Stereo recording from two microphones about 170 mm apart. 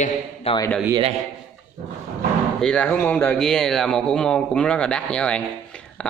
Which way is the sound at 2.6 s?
5° left (ahead or behind).